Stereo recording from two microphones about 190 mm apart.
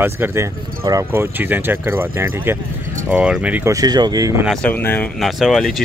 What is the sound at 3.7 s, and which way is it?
Speech, 20° right (ahead or behind).